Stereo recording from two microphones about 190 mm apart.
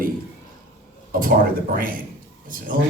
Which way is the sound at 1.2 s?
50° right (ahead or behind).